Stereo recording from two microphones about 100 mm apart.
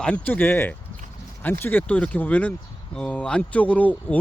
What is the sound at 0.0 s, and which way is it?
Speech, 10° left (ahead or behind).